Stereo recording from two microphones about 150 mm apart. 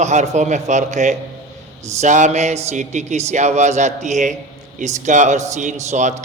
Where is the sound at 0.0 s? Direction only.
50° right (ahead or behind).